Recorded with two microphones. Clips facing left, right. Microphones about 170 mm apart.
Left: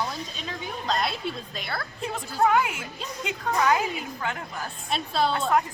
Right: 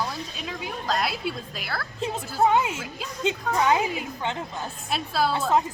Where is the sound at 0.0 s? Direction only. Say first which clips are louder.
Right 1 dB; 5° right (ahead or behind).